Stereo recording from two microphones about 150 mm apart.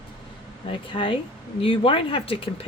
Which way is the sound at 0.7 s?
35° left (ahead or behind).